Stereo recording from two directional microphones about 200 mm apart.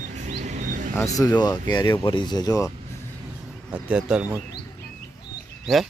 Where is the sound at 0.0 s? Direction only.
35° right (ahead or behind).